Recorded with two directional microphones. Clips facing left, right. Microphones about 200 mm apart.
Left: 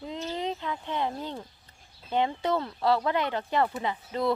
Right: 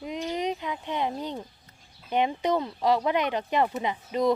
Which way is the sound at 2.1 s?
15° right (ahead or behind).